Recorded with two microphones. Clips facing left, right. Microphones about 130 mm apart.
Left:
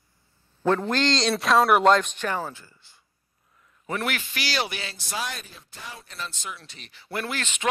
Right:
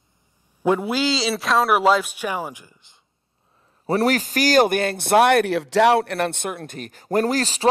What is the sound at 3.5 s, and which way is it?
A man's voice, 35° right (ahead or behind).